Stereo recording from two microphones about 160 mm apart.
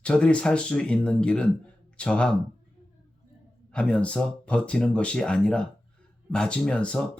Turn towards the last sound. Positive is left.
turn(degrees=5)  # may be behind; listen again after turning